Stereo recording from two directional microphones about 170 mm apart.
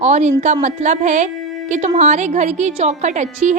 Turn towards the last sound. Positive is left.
turn(degrees=-45)  # may be behind; listen again after turning